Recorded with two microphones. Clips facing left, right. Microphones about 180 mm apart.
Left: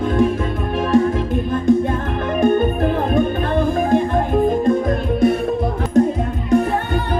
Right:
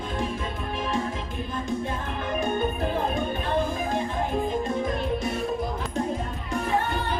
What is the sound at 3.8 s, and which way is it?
Music, 55° left (ahead or behind).